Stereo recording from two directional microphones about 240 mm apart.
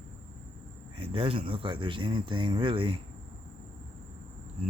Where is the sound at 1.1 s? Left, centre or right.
Right.